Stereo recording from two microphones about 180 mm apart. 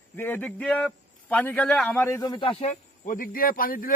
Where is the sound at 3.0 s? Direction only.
50° left (ahead or behind).